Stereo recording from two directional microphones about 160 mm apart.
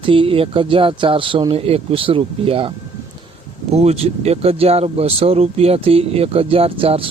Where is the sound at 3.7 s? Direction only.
40° right (ahead or behind).